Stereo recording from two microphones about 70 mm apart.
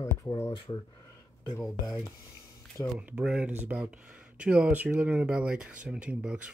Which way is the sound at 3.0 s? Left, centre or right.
Centre.